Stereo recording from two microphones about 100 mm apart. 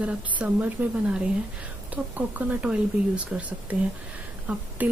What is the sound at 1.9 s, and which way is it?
Speech, 15° right (ahead or behind).